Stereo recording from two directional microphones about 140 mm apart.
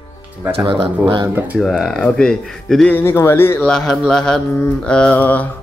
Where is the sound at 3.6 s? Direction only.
5° left (ahead or behind).